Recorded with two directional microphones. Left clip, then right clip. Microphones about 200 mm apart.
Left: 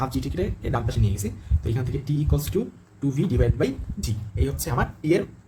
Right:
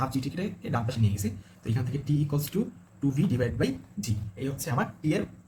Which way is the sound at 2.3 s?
20° left (ahead or behind).